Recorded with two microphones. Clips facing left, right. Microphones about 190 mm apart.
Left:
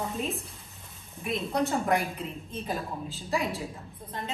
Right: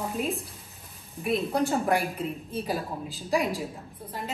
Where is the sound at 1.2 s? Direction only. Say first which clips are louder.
Right 3 dB; centre (ahead or behind).